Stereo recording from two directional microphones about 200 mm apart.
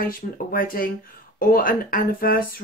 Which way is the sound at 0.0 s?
45° left (ahead or behind).